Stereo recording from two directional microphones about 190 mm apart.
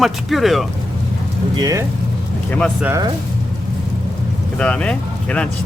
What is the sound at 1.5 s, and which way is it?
Speech, 20° right (ahead or behind).